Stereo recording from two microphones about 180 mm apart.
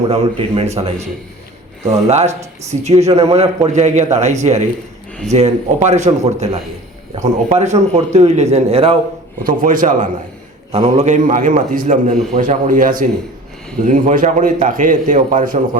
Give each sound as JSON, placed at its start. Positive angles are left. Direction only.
{"t": 0.1, "sound": "a man's voice", "side_deg": -35}
{"t": 2.0, "sound": "a man's voice", "side_deg": -35}
{"t": 9.4, "sound": "a man's voice", "side_deg": -50}
{"t": 10.7, "sound": "a man's voice", "side_deg": -35}